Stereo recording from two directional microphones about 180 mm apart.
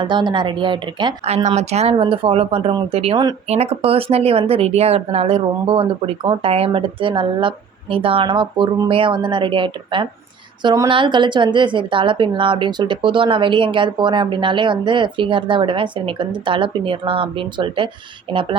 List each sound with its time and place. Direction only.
0.0 s a woman's voice: 25° right (ahead or behind)